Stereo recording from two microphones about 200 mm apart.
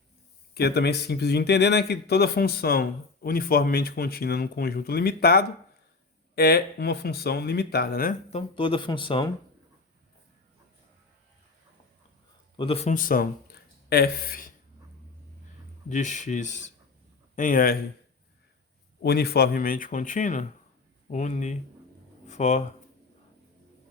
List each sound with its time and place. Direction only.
0.5 s speech: 55° left (ahead or behind)
8.3 s speech: 25° left (ahead or behind)
12.5 s speech: 30° left (ahead or behind); by 14.5 s 45° left (ahead or behind)
15.9 s speech: 35° left (ahead or behind)
19.0 s speech: 50° left (ahead or behind); by 22.6 s 35° left (ahead or behind)